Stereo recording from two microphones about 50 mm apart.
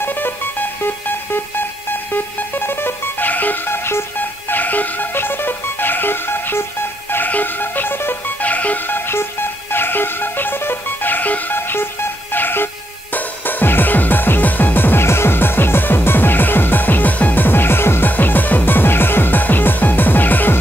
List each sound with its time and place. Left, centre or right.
0.0 s music: left
4.2 s music: left
7.2 s music: left
8.4 s music: left
8.9 s music: left
15.0 s music: left
18.1 s music: left